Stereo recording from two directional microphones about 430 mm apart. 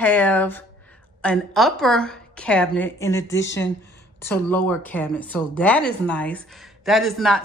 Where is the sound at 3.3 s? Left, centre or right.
Left.